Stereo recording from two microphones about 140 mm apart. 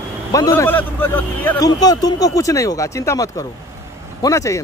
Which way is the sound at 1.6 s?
25° left (ahead or behind).